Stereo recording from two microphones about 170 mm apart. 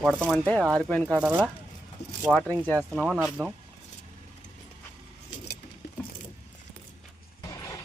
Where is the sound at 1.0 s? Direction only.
10° right (ahead or behind).